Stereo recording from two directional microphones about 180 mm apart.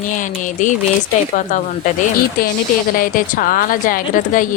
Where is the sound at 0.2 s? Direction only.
45° left (ahead or behind).